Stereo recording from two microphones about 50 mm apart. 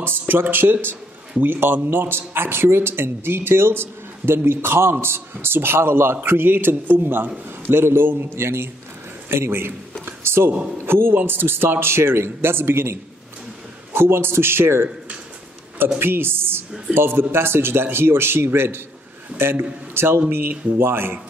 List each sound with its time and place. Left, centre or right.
0.0 s speech: right
10.0 s a sound: right
10.8 s speech: right
13.9 s speech: right
16.0 s speech: right